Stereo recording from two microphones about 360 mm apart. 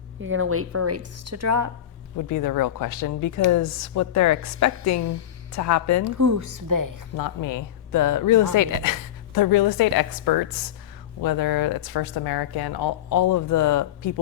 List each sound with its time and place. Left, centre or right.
0.2 s a woman's voice: right
2.1 s a woman's voice: left
6.1 s speech: right
7.2 s speech: left
11.2 s speech: left